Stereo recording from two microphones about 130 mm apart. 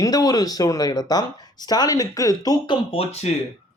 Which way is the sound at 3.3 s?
60° left (ahead or behind).